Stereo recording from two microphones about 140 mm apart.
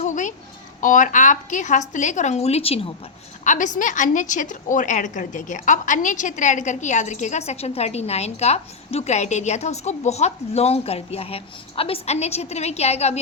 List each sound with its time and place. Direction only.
0.0 s a sound: 60° left (ahead or behind)
0.8 s a woman's voice: 70° left (ahead or behind); by 2.9 s 45° left (ahead or behind)
3.4 s a woman's voice: 60° left (ahead or behind)